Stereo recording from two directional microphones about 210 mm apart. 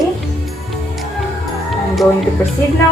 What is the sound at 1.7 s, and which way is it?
Music, centre (ahead or behind).